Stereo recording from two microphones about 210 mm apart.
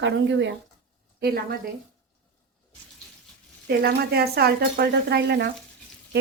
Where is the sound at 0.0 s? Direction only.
60° right (ahead or behind).